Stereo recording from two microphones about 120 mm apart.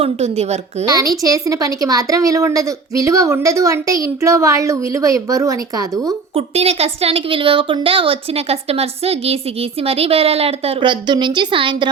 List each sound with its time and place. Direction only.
0.0 s a woman's voice: 65° right (ahead or behind)
0.9 s a woman's voice: 30° right (ahead or behind)
6.3 s a woman's voice: 60° right (ahead or behind)
10.8 s a woman's voice: 40° right (ahead or behind)